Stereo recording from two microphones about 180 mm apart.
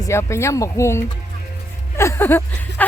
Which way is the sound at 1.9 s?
15° left (ahead or behind).